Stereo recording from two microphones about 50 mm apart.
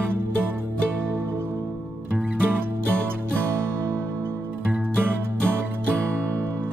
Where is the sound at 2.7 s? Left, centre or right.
Right.